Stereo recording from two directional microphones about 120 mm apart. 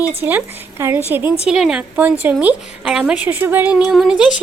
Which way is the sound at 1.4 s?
5° right (ahead or behind).